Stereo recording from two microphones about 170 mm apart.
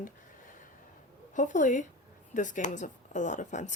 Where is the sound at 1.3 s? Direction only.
50° left (ahead or behind).